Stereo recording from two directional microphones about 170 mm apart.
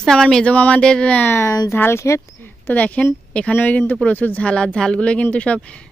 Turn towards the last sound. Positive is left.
turn(degrees=5)  # may be behind; listen again after turning